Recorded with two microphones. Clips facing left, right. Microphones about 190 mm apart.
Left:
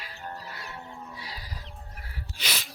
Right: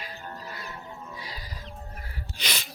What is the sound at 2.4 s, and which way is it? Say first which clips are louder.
Sneeze: right 1 dB; 5° left (ahead or behind).